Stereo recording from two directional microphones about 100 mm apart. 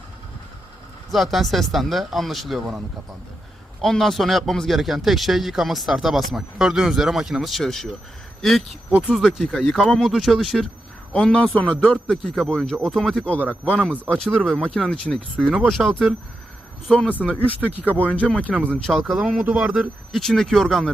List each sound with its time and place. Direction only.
1.1 s speech: centre (ahead or behind); by 13.8 s 15° left (ahead or behind)
14.3 s speech: 5° left (ahead or behind)
16.9 s speech: 15° left (ahead or behind)
17.7 s speech: 15° right (ahead or behind)
18.0 s speech: 15° left (ahead or behind)
18.5 s speech: 15° right (ahead or behind)
18.9 s speech: centre (ahead or behind)
20.1 s speech: 5° left (ahead or behind)